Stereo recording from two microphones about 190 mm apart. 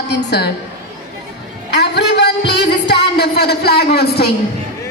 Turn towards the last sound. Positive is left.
turn(degrees=55)  # may be behind; listen again after turning